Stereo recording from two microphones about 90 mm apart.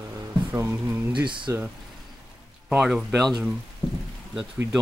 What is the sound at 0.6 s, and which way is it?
Speech, 30° right (ahead or behind).